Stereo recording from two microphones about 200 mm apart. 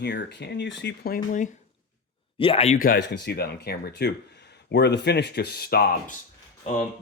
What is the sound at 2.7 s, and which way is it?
Speech, 50° left (ahead or behind).